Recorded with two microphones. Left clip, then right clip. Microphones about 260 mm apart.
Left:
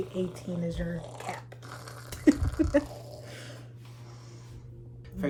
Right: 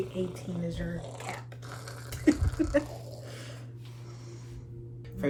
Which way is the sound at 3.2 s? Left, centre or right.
Left.